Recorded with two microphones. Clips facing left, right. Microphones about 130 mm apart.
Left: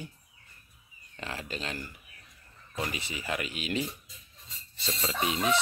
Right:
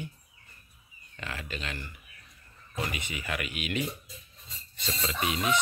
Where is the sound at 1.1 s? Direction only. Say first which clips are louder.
Left 1 dB; 35° left (ahead or behind).